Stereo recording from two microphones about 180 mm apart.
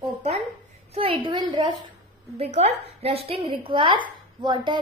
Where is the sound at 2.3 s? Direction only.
35° right (ahead or behind).